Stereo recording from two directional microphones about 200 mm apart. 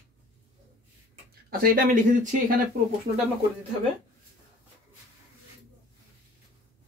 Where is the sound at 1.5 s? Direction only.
45° right (ahead or behind).